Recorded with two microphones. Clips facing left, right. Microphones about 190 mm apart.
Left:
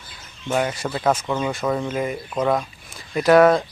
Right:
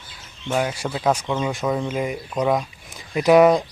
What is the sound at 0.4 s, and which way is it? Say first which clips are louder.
Speech: left 1 dB; 5° right (ahead or behind).